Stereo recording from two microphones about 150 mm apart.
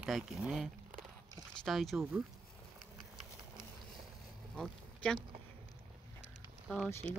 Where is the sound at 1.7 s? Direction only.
Centre (ahead or behind).